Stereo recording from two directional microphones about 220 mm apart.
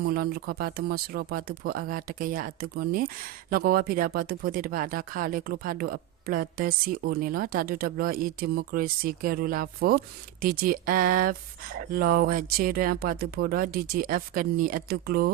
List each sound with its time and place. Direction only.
0.0 s speech: 45° right (ahead or behind)